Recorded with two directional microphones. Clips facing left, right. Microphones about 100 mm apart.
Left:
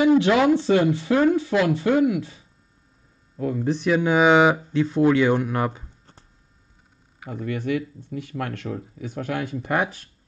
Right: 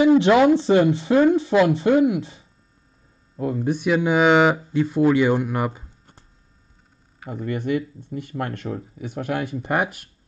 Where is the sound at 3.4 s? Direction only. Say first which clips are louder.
Right 1 dB; 20° right (ahead or behind).